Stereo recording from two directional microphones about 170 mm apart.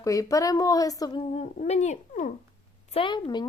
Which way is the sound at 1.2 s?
40° left (ahead or behind).